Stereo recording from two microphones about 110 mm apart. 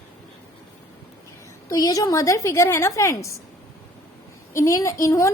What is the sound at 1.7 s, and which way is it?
A woman's voice, 35° left (ahead or behind).